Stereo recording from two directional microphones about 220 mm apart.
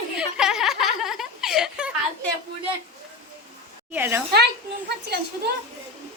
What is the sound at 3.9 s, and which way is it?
Speech, 10° right (ahead or behind).